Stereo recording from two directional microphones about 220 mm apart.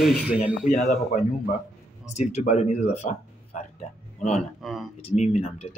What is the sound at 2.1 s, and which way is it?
Speech, 30° left (ahead or behind).